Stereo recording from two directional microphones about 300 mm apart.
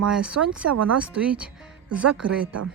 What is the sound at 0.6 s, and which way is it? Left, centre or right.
Speech, right.